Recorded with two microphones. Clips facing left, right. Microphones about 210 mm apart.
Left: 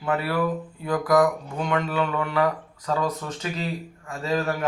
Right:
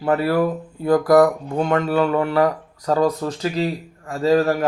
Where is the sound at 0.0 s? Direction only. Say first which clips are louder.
Right 6 dB; 40° right (ahead or behind).